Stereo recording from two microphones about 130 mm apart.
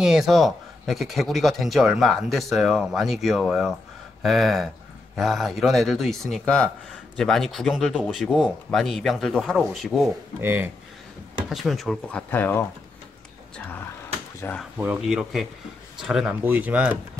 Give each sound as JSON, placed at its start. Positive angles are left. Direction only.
{"t": 0.0, "sound": "speech", "side_deg": -5}
{"t": 10.4, "sound": "speech", "side_deg": -15}
{"t": 11.4, "sound": "speech", "side_deg": 0}
{"t": 14.4, "sound": "speech", "side_deg": 20}
{"t": 15.0, "sound": "speech", "side_deg": -5}